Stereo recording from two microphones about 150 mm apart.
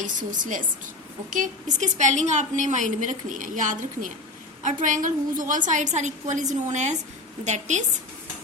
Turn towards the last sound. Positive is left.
turn(degrees=-50)  # may be behind; listen again after turning